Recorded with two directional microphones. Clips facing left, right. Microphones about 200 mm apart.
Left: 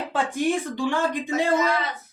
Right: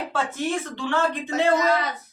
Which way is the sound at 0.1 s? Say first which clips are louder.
Left 4 dB; 15° left (ahead or behind).